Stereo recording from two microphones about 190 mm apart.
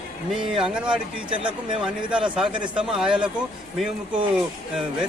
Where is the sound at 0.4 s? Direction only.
5° right (ahead or behind).